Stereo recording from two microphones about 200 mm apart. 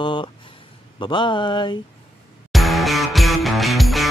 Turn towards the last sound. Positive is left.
turn(degrees=0)  # may be behind; listen again after turning